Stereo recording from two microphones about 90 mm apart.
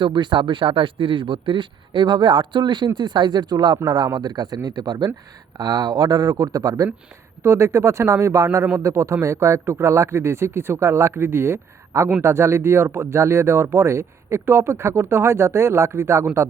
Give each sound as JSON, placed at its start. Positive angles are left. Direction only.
{"t": 0.0, "sound": "speech", "side_deg": -60}
{"t": 7.4, "sound": "speech", "side_deg": -30}